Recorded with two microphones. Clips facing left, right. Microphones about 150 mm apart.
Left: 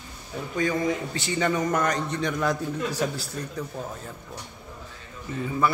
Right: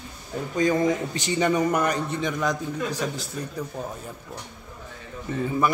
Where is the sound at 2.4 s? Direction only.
10° left (ahead or behind).